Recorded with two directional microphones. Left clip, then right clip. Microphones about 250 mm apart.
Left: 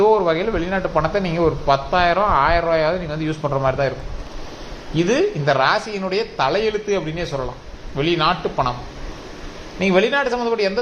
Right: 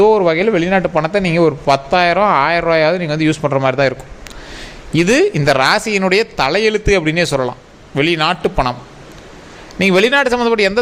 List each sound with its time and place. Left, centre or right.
0.0 s a man's voice: right
4.9 s a man's voice: right
9.7 s a man's voice: right